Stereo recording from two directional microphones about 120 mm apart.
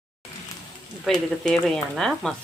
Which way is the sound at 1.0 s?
5° left (ahead or behind).